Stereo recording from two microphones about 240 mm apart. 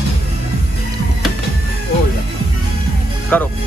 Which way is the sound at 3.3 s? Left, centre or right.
Centre.